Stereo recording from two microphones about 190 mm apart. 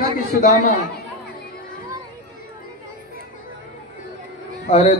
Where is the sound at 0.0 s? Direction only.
50° left (ahead or behind).